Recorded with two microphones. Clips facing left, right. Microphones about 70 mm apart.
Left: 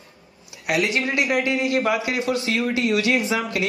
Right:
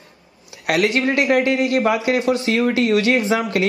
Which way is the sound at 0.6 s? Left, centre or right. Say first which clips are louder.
Right 4 dB; right.